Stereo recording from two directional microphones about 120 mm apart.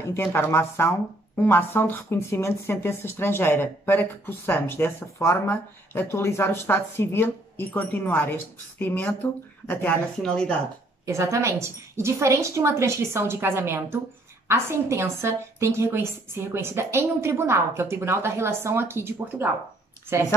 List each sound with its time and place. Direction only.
0.1 s speech: 20° left (ahead or behind)
11.1 s a woman's voice: 25° right (ahead or behind)